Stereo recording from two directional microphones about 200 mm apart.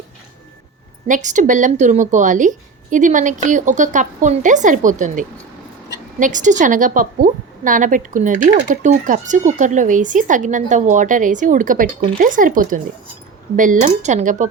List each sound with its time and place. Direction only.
1.0 s a woman's voice: 40° right (ahead or behind)